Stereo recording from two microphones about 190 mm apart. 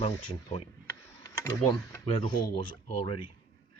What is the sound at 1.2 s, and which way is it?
Speech, 15° left (ahead or behind).